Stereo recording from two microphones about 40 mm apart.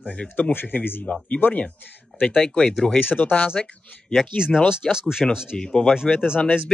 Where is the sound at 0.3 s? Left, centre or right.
Left.